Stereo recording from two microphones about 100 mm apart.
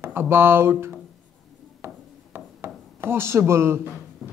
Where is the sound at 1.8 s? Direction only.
25° right (ahead or behind).